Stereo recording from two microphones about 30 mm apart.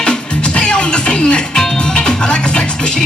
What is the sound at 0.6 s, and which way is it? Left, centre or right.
Music, left.